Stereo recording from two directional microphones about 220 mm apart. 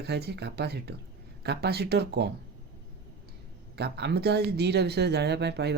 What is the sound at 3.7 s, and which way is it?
Speech, 50° right (ahead or behind).